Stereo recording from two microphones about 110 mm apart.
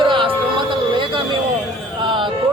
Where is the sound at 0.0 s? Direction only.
50° right (ahead or behind).